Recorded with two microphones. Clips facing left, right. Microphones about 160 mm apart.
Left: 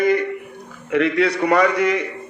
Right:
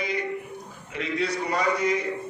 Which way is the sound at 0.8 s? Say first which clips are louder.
Left 11 dB; 70° left (ahead or behind).